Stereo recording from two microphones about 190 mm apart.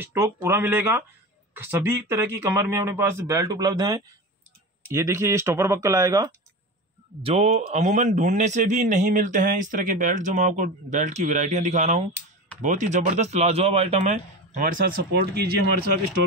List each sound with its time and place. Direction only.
0.0 s speech: 15° right (ahead or behind)
7.2 s a man's voice: 30° right (ahead or behind); by 15.9 s 55° right (ahead or behind)